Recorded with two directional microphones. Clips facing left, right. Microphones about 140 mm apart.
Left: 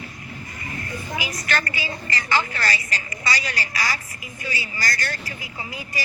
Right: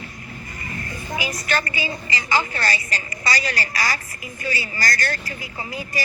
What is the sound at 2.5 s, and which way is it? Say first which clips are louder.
A woman's voice: right 1 dB; 30° right (ahead or behind).